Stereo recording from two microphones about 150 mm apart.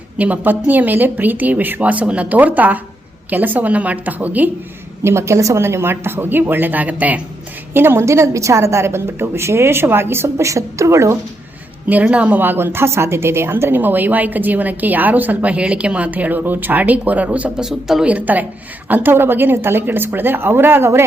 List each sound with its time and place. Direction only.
0.2 s a woman's voice: 10° right (ahead or behind)